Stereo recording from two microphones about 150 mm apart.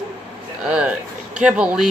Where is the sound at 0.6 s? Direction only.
5° right (ahead or behind).